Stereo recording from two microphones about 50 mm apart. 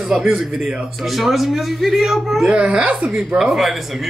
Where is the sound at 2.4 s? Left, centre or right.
Centre.